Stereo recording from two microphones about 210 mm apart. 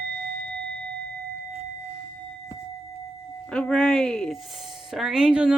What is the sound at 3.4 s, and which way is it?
Speech, 5° left (ahead or behind).